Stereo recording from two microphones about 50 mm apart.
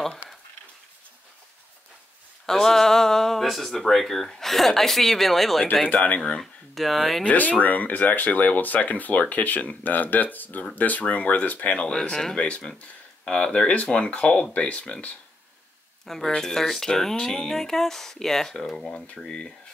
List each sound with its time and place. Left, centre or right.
2.4 s speech: centre
7.2 s speech: left
11.8 s speech: centre
12.4 s speech: left
16.1 s speech: centre